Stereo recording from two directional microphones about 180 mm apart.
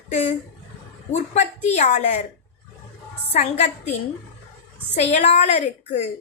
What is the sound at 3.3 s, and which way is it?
Speech, 40° left (ahead or behind).